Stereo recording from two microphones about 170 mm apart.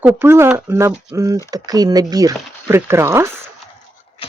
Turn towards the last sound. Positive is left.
turn(degrees=-15)  # may be behind; listen again after turning